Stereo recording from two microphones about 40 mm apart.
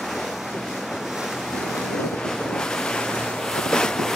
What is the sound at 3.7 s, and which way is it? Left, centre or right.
Waves, centre.